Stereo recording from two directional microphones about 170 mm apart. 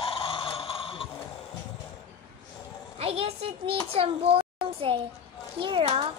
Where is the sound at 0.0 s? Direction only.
35° left (ahead or behind).